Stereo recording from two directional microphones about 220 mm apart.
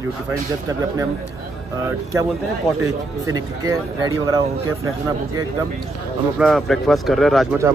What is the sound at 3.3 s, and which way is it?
Speech, 15° right (ahead or behind).